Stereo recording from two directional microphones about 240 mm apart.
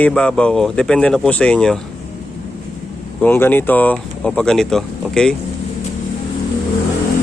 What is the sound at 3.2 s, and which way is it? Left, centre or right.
Speech, centre.